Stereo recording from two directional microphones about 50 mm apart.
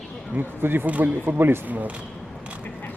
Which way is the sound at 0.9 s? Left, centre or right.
Right.